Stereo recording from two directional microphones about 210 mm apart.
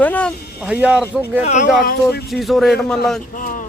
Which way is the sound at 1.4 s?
40° left (ahead or behind).